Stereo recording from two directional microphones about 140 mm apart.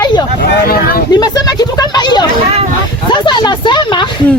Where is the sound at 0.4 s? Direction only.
90° left.